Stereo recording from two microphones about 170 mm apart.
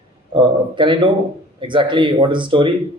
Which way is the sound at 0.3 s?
30° right (ahead or behind).